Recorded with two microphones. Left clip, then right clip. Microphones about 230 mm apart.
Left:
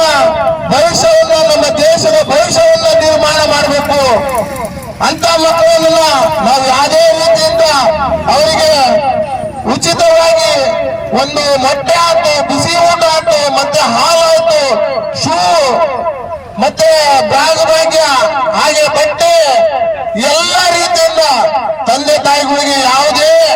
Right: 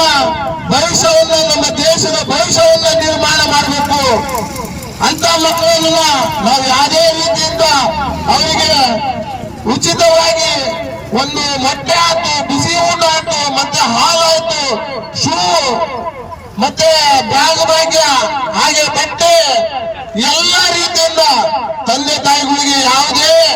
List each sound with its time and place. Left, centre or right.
0.0 s vehicle: centre
5.0 s a sound: centre
9.6 s a man's voice: centre